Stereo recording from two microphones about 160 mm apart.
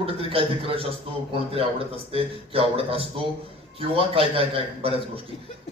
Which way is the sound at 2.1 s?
35° right (ahead or behind).